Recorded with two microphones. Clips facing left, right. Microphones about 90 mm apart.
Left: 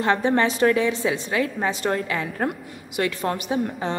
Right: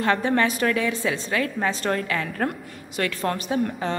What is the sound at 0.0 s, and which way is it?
A woman's voice, 20° left (ahead or behind).